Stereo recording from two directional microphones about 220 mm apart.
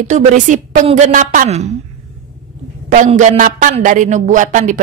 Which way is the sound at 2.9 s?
35° right (ahead or behind).